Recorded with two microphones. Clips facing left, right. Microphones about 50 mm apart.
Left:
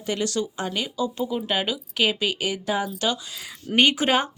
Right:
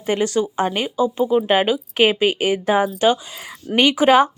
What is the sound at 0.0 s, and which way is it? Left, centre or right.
Speech, right.